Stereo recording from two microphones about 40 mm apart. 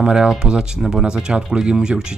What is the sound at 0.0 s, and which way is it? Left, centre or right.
Speech, centre.